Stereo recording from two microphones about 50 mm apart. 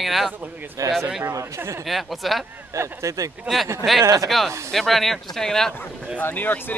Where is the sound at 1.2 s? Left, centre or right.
Right.